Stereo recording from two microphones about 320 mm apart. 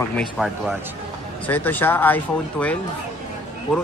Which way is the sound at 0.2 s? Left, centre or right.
Centre.